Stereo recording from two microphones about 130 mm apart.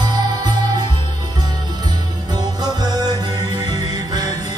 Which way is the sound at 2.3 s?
30° right (ahead or behind).